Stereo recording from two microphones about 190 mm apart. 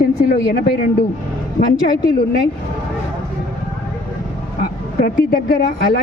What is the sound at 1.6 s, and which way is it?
Speech, 35° left (ahead or behind).